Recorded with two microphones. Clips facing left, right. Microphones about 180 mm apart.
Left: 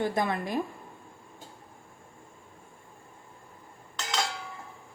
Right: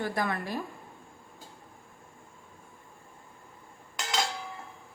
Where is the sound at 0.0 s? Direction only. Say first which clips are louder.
Left 3 dB; 20° left (ahead or behind).